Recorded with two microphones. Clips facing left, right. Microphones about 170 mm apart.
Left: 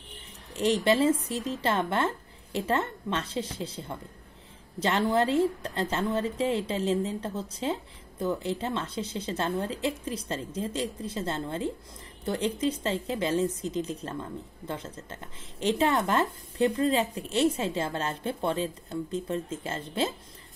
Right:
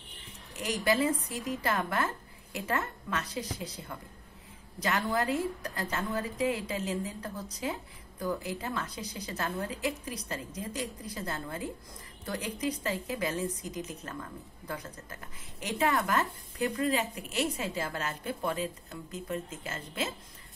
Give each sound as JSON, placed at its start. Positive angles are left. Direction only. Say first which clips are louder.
{"t": 0.6, "sound": "a woman's voice", "louder": "left 5 dB", "side_deg": 30}